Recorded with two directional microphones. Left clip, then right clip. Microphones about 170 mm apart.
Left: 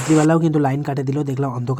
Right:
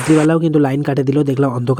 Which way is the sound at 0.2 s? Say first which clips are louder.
Right 3 dB; 20° right (ahead or behind).